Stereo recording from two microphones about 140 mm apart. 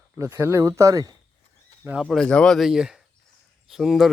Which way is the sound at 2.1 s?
5° left (ahead or behind).